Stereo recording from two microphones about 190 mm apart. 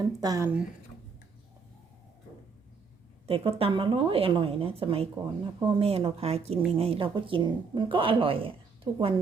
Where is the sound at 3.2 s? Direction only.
30° right (ahead or behind).